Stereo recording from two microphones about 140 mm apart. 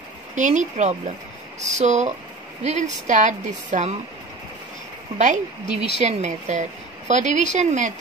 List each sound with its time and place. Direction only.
0.4 s a woman's voice: 60° right (ahead or behind)
5.1 s a woman's voice: 55° right (ahead or behind)